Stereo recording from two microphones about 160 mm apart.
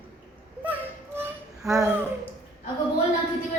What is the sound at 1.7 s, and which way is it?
Speech, 20° right (ahead or behind).